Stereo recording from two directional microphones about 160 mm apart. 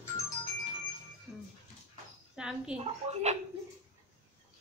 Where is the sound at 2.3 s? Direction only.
5° right (ahead or behind).